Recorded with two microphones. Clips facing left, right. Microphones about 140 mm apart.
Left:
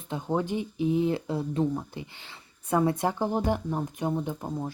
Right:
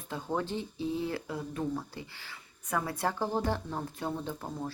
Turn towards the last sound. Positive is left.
turn(degrees=15)  # may be behind; listen again after turning